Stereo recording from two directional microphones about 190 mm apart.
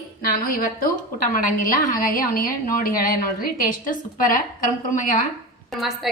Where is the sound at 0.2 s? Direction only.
50° left (ahead or behind).